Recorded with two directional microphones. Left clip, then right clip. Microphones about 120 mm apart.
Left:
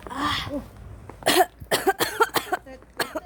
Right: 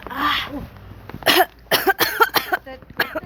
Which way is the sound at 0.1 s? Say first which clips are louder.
Right 6 dB; 25° left (ahead or behind).